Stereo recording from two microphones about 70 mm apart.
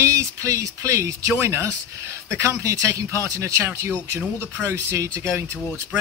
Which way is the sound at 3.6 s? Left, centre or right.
Right.